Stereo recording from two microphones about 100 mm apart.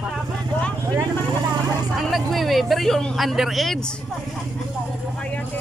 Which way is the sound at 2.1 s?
Centre (ahead or behind).